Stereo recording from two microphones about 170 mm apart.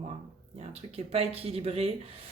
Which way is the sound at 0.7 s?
35° right (ahead or behind).